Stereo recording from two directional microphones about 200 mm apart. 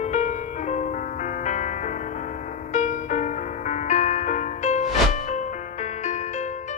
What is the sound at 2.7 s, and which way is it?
Music, 35° left (ahead or behind).